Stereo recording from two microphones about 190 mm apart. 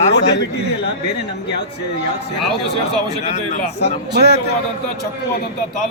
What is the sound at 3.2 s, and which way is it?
Speech, 40° left (ahead or behind).